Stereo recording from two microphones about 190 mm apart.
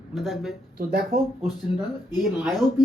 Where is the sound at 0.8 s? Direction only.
50° right (ahead or behind).